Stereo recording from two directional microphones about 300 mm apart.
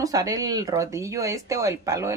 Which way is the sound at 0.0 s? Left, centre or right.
Centre.